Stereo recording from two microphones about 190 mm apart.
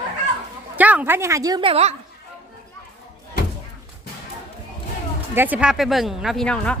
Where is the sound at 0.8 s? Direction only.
10° right (ahead or behind); by 2.0 s 35° right (ahead or behind).